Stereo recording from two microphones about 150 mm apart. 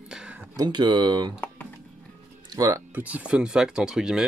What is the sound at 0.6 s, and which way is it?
Speech, 30° right (ahead or behind).